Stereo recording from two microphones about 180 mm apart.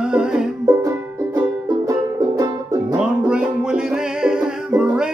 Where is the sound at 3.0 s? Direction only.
5° right (ahead or behind).